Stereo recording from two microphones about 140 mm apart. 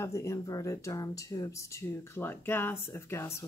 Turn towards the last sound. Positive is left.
turn(degrees=20)  # may be behind; listen again after turning